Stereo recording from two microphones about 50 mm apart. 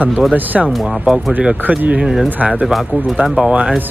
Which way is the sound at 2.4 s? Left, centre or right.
Right.